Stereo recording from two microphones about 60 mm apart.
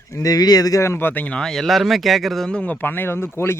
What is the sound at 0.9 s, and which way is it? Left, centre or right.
Speech, left.